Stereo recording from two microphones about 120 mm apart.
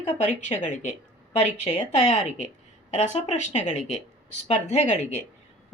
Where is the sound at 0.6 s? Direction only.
85° left.